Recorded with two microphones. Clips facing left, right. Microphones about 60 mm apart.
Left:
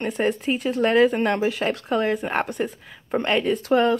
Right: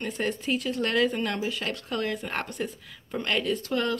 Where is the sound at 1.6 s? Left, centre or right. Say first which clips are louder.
Left 8 dB; left.